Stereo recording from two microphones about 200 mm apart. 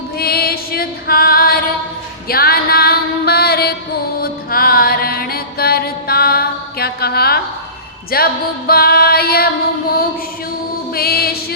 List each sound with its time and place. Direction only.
0.2 s female singing: 50° left (ahead or behind)
2.2 s music: 50° left (ahead or behind)
10.9 s music: 50° left (ahead or behind)